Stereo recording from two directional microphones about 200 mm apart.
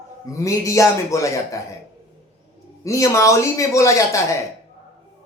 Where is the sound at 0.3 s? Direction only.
15° left (ahead or behind).